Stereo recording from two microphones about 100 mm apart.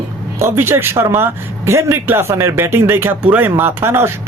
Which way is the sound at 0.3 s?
25° right (ahead or behind).